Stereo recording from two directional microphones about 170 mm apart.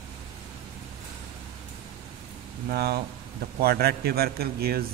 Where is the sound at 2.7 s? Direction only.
70° right (ahead or behind).